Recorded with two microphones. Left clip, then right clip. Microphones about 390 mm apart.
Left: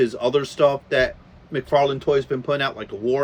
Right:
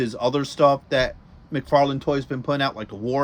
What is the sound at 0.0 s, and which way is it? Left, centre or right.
Speech, centre.